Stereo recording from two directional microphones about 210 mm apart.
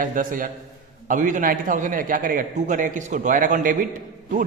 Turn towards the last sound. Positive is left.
turn(degrees=-40)  # may be behind; listen again after turning